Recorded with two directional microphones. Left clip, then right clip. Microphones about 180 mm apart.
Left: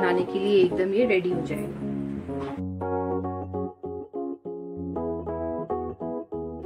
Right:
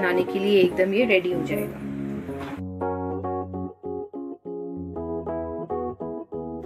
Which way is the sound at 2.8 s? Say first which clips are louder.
Even; centre (ahead or behind).